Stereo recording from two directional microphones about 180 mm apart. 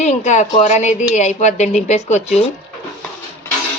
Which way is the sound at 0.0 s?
40° left (ahead or behind).